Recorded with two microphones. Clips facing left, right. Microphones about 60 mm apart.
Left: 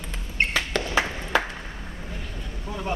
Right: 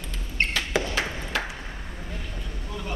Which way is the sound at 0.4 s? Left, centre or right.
Centre.